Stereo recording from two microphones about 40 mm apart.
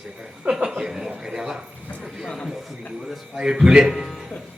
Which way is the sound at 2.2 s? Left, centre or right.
Centre.